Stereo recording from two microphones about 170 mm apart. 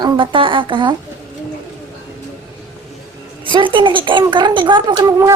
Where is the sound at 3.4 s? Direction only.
30° right (ahead or behind).